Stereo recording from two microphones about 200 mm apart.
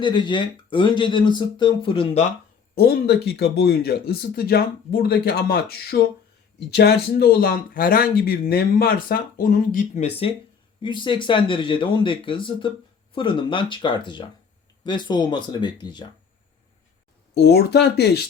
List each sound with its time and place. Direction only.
0.0 s speech: 20° left (ahead or behind)
2.7 s speech: 50° left (ahead or behind)
10.8 s speech: 25° left (ahead or behind)
17.3 s speech: 55° left (ahead or behind)